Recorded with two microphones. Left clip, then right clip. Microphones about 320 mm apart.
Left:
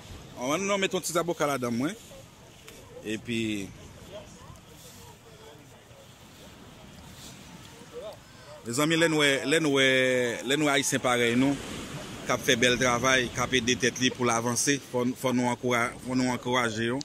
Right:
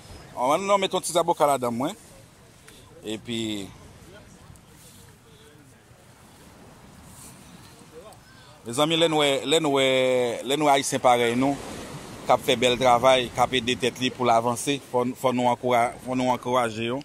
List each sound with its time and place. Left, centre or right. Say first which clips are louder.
0.4 s speech: right 6 dB; centre
3.1 s speech: right 1 dB; centre
8.6 s speech: right 3 dB; centre